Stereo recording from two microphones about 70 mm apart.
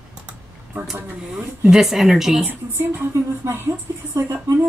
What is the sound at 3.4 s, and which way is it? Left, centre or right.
Speech, right.